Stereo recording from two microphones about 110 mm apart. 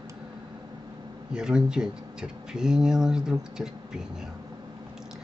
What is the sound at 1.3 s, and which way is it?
Speech, 5° right (ahead or behind).